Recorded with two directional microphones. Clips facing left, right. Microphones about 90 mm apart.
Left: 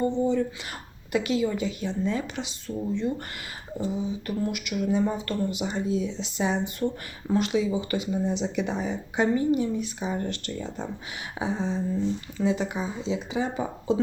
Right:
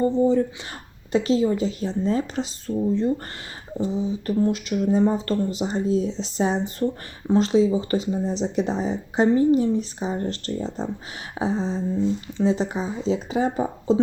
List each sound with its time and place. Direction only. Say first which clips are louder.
0.0 s speech: right 5 dB; 35° right (ahead or behind)